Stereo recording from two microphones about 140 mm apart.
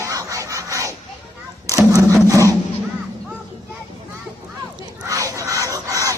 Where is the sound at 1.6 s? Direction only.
25° right (ahead or behind).